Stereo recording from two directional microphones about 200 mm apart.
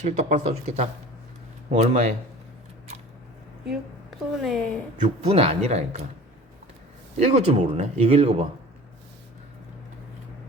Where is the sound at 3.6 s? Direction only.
Centre (ahead or behind).